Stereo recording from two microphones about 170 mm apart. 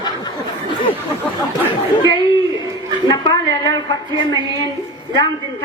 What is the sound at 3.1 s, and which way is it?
A woman's voice, 25° left (ahead or behind).